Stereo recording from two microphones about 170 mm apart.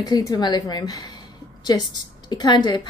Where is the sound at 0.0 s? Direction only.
20° left (ahead or behind).